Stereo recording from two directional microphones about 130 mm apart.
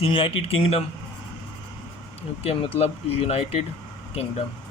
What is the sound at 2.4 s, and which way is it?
Speech, 50° left (ahead or behind).